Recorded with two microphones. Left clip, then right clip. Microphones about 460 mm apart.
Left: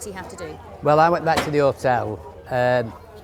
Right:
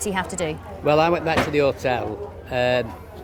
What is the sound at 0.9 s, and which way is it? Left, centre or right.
A man's voice, left.